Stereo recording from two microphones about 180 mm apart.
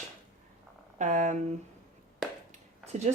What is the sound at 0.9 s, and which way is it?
Speech, 45° right (ahead or behind).